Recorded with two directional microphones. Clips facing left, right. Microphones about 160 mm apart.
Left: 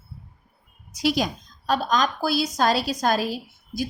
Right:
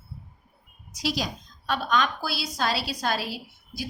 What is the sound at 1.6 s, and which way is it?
A woman's voice, 40° left (ahead or behind).